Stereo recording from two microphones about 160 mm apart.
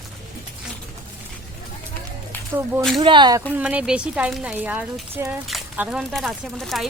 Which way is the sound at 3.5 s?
10° right (ahead or behind).